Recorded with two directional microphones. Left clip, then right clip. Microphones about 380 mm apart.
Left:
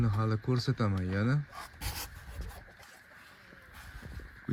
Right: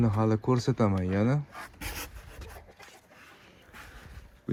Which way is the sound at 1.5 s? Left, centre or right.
Left.